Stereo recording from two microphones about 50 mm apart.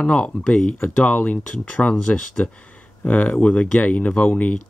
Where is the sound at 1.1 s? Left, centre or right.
Left.